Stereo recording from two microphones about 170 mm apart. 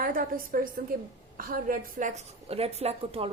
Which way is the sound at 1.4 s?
55° right (ahead or behind).